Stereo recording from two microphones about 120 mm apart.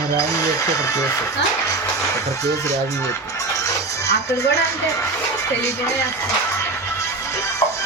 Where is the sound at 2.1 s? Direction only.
25° left (ahead or behind).